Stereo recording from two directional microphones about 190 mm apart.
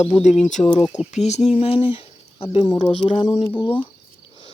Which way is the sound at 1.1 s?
35° left (ahead or behind).